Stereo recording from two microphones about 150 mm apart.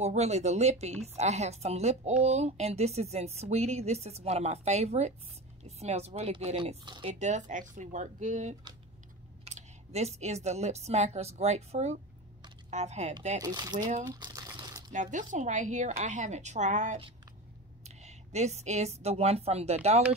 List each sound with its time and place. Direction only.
0.0 s speech: 50° right (ahead or behind); by 7.1 s 35° right (ahead or behind)
7.2 s speech: 50° right (ahead or behind)
13.4 s speech: 25° right (ahead or behind)
14.0 s a sound: 25° right (ahead or behind)
14.9 s a woman's voice: 55° right (ahead or behind)